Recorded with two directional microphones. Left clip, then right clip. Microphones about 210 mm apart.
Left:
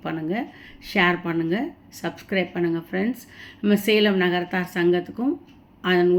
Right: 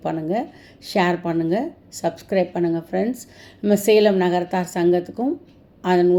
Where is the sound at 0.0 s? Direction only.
10° right (ahead or behind).